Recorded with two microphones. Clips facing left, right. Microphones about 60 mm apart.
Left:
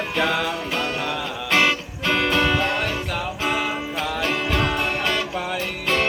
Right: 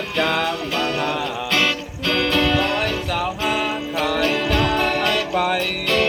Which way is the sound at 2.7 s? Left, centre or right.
Right.